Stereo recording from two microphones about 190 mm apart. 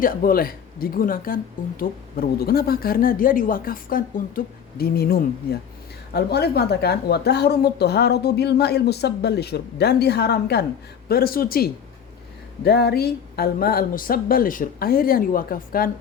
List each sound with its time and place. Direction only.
0.0 s a woman's voice: 50° left (ahead or behind)